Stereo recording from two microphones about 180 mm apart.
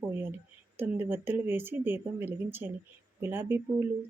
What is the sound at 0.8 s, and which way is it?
Speech, 10° right (ahead or behind).